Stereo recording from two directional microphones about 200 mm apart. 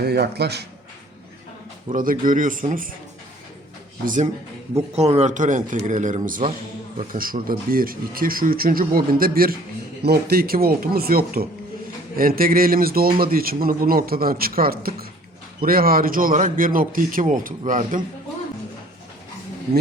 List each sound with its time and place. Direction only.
0.0 s a man's voice: 50° right (ahead or behind)
1.9 s a man's voice: 45° right (ahead or behind)
4.0 s a man's voice: 40° right (ahead or behind)